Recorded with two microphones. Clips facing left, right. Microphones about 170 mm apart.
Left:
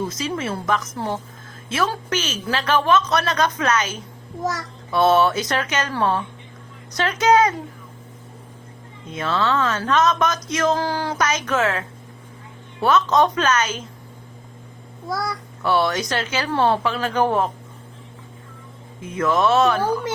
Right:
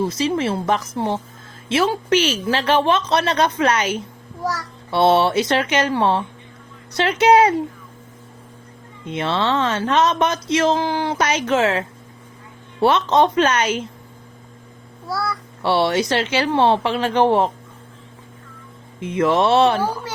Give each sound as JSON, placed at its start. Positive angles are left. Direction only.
{"t": 0.0, "sound": "speech", "side_deg": -30}
{"t": 9.1, "sound": "speech", "side_deg": -30}
{"t": 15.6, "sound": "speech", "side_deg": -30}
{"t": 19.0, "sound": "speech", "side_deg": -30}